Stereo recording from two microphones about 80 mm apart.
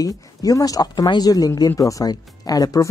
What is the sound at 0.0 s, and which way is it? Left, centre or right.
Speech, left.